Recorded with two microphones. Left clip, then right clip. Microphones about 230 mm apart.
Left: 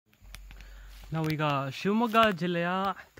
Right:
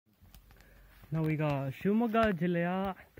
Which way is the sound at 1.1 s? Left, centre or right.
Centre.